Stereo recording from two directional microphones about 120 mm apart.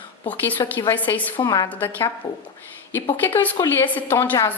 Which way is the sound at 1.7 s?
15° left (ahead or behind).